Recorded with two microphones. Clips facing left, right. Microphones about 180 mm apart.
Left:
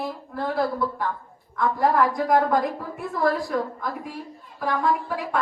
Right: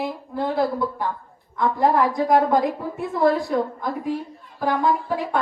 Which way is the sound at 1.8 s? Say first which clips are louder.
Right 2 dB; centre (ahead or behind).